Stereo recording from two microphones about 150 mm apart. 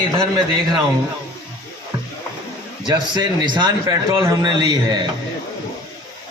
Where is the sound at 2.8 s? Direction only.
25° right (ahead or behind).